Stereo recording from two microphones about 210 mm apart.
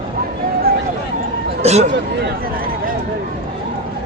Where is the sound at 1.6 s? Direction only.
30° right (ahead or behind).